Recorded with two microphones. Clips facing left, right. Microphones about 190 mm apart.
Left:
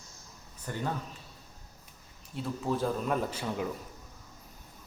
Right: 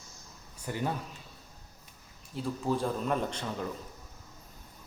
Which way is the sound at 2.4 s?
Centre (ahead or behind).